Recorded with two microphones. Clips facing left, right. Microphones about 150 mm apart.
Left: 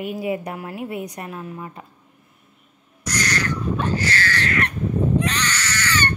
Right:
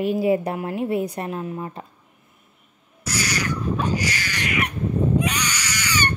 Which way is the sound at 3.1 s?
10° right (ahead or behind).